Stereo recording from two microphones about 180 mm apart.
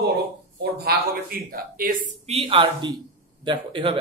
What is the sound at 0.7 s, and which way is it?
Speech, 60° right (ahead or behind).